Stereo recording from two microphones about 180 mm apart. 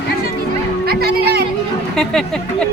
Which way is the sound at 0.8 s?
60° right (ahead or behind).